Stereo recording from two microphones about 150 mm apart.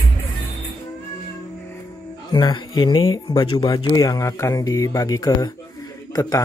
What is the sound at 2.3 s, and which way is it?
Speech, 30° left (ahead or behind).